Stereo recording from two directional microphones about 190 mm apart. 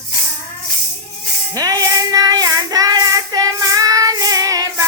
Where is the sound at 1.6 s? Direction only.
20° right (ahead or behind).